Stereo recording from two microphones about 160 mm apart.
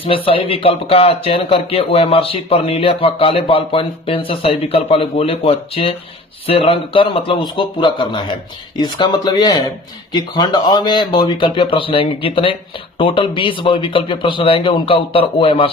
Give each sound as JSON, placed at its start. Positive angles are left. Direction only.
{"t": 0.0, "sound": "speech", "side_deg": 35}